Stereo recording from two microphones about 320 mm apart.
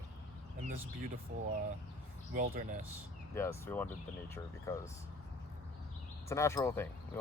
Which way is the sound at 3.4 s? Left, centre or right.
Centre.